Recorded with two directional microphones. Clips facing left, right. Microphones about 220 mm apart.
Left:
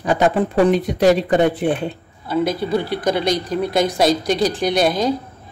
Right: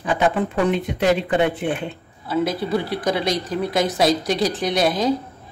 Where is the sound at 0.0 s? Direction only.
40° left (ahead or behind).